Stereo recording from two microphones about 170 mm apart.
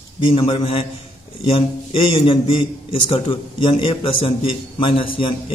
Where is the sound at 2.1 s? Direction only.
30° left (ahead or behind).